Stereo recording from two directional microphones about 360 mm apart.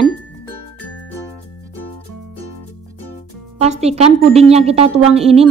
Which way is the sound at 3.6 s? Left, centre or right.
Centre.